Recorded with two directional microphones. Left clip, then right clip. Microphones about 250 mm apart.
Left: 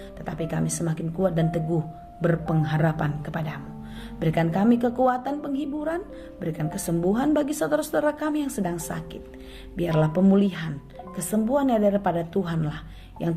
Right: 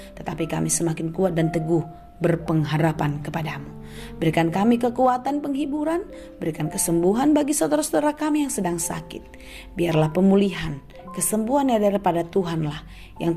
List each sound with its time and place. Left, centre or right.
0.3 s speech: right